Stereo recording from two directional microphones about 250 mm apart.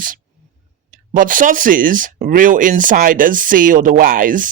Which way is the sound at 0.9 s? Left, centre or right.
Right.